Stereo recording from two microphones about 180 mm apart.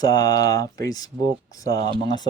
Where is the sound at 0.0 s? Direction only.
20° left (ahead or behind).